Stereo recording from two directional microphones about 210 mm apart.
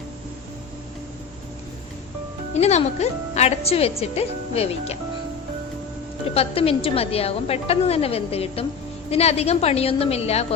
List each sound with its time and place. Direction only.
2.6 s a woman's voice: 30° left (ahead or behind)
6.3 s a woman's voice: 25° left (ahead or behind)